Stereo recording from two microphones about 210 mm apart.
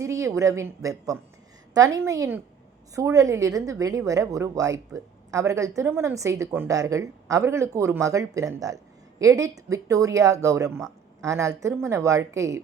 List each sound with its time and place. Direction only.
0.0 s a woman's voice: 15° right (ahead or behind)